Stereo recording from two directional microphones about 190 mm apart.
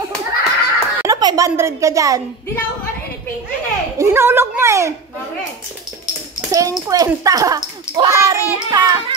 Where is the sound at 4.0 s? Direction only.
15° right (ahead or behind).